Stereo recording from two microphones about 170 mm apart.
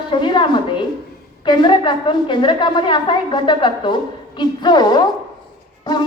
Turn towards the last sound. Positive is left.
turn(degrees=25)  # may be behind; listen again after turning